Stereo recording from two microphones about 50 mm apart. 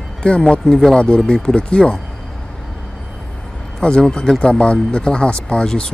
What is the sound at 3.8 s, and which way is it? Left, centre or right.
Speech, centre.